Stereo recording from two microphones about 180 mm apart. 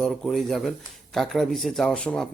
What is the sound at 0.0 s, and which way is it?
Speech, centre (ahead or behind).